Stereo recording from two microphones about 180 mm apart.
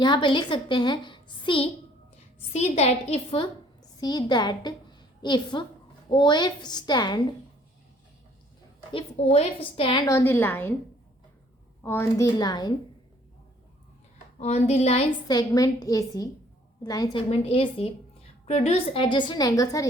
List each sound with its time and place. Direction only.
0.0 s a woman's voice: 25° left (ahead or behind)
8.9 s a woman's voice: 35° left (ahead or behind)
10.1 s a woman's voice: 15° left (ahead or behind)
11.8 s a woman's voice: 15° left (ahead or behind)
14.3 s a woman's voice: 40° left (ahead or behind)
15.3 s a woman's voice: 20° left (ahead or behind)
17.2 s a woman's voice: 35° left (ahead or behind)